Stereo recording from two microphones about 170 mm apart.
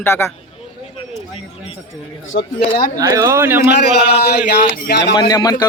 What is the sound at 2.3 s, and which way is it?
Speech, 60° left (ahead or behind).